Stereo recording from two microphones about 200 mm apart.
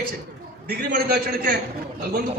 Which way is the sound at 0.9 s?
50° right (ahead or behind).